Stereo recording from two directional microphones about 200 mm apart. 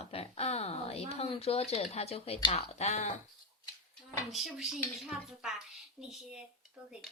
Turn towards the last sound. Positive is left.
turn(degrees=0)  # may be behind; listen again after turning